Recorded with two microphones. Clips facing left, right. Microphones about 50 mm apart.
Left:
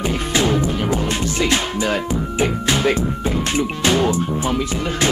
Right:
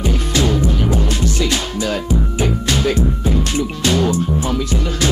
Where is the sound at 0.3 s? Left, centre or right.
Left.